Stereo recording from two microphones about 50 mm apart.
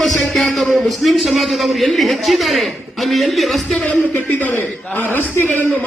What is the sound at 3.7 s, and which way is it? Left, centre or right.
A man's voice, left.